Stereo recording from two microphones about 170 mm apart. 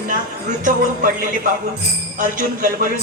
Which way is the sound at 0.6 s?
50° right (ahead or behind).